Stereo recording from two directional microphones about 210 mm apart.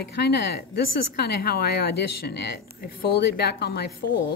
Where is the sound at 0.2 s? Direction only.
50° left (ahead or behind).